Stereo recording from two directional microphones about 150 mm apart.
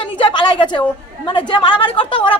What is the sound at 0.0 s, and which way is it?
A woman's voice, 35° left (ahead or behind).